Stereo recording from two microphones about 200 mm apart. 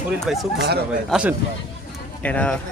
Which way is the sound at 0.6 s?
55° right (ahead or behind).